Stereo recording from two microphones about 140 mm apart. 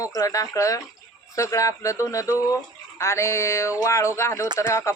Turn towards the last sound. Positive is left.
turn(degrees=20)  # may be behind; listen again after turning